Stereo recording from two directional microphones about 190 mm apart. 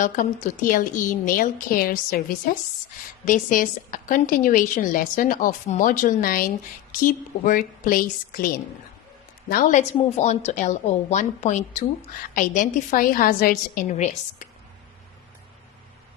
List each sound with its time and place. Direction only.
0.0 s a woman's voice: 45° left (ahead or behind)
3.2 s a woman's voice: 45° left (ahead or behind)